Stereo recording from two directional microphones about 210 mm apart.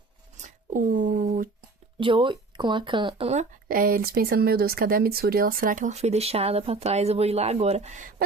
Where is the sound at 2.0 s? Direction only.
25° right (ahead or behind).